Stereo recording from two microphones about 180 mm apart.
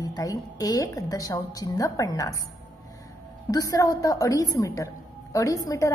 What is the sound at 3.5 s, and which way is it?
A woman's voice, 20° left (ahead or behind).